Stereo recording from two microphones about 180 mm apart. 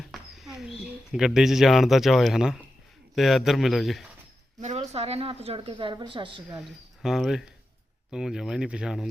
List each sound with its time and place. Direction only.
0.0 s a sound: centre (ahead or behind)
1.1 s speech: 5° right (ahead or behind)
4.6 s a woman's voice: 40° right (ahead or behind)
6.5 s speech: 5° right (ahead or behind)